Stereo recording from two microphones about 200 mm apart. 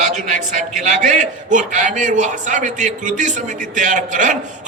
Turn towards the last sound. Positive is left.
turn(degrees=-40)  # may be behind; listen again after turning